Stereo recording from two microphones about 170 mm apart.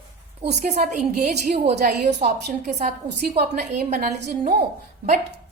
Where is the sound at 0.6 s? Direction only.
45° right (ahead or behind).